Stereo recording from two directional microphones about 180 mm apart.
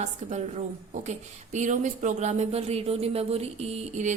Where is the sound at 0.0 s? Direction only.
40° right (ahead or behind).